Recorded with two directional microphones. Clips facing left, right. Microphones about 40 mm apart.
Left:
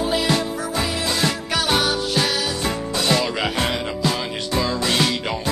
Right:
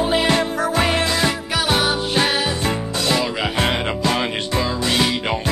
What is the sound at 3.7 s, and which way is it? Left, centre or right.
Music, right.